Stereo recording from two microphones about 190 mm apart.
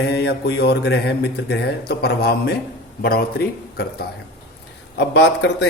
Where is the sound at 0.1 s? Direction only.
60° left (ahead or behind).